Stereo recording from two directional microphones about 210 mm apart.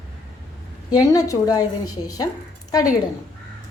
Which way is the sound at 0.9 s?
15° left (ahead or behind).